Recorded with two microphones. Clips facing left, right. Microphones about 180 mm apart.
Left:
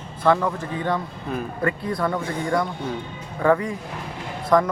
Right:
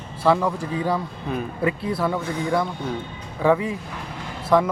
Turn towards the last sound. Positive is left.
turn(degrees=-5)  # may be behind; listen again after turning